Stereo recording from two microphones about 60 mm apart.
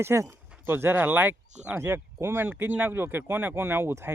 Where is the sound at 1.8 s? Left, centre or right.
Right.